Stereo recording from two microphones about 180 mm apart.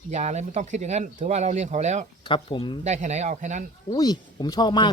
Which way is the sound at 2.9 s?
40° right (ahead or behind).